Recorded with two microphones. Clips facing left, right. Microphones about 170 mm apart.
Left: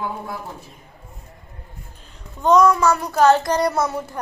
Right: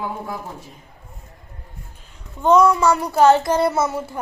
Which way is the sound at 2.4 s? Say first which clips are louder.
Even; 10° right (ahead or behind).